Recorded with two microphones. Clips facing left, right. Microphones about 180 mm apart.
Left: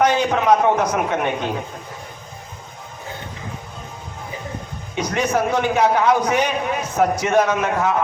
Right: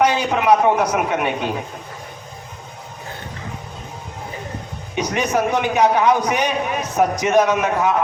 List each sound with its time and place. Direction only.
0.0 s a man's voice: 10° right (ahead or behind)
4.9 s a man's voice: 15° right (ahead or behind)